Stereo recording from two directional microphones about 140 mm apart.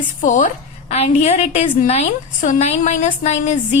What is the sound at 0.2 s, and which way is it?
A woman's voice, 65° left (ahead or behind).